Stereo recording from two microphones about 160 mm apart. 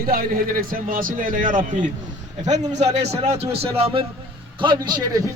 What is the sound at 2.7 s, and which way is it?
A man's voice, 45° right (ahead or behind).